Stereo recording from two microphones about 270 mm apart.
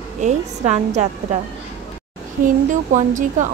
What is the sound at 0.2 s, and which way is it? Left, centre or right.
Speech, right.